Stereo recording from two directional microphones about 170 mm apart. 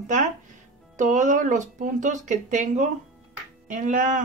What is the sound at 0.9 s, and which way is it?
Speech, 45° right (ahead or behind).